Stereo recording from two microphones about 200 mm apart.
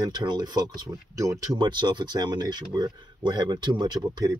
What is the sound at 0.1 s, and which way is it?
Speech, 20° right (ahead or behind).